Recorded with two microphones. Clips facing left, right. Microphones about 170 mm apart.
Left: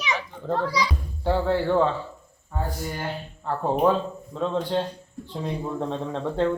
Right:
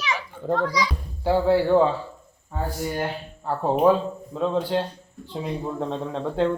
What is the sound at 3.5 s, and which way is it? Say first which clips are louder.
Speech: right 3 dB; 10° right (ahead or behind).